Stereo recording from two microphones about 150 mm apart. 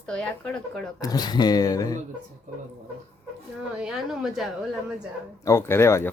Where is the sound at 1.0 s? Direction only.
25° left (ahead or behind).